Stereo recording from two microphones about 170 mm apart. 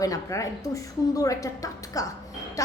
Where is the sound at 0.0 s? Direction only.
20° left (ahead or behind).